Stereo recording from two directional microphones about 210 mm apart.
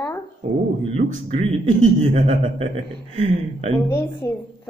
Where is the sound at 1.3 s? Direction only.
35° right (ahead or behind).